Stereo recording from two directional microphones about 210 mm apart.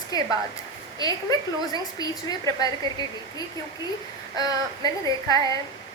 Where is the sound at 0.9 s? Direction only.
20° left (ahead or behind).